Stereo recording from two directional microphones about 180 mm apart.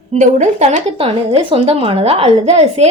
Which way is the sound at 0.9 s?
30° right (ahead or behind).